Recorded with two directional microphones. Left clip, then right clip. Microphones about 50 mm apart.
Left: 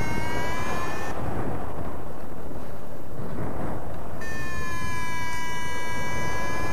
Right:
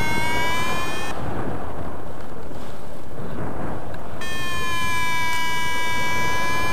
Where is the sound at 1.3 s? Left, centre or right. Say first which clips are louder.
Right 3 dB; centre.